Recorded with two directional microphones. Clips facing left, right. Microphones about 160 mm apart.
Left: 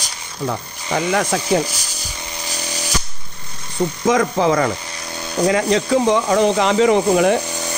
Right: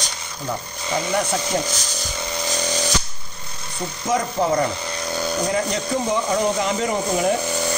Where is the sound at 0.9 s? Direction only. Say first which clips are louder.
Left 4 dB; 90° left.